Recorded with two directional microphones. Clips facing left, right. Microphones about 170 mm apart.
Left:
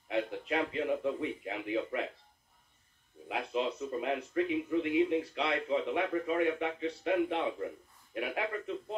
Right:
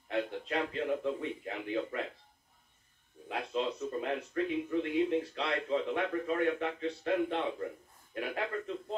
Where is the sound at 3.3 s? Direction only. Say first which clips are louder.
Left 1 dB; 10° left (ahead or behind).